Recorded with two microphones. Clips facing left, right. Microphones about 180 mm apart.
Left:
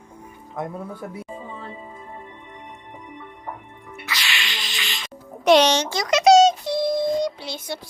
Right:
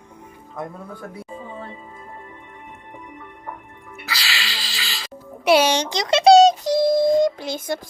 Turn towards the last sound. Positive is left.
turn(degrees=-50)  # may be behind; listen again after turning